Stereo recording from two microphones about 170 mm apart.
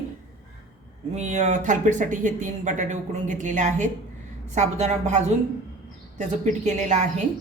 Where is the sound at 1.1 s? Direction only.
45° right (ahead or behind).